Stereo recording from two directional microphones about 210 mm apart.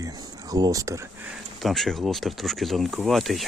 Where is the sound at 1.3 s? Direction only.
Centre (ahead or behind).